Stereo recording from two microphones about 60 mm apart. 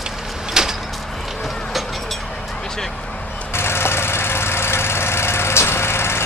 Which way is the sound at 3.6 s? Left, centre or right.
Left.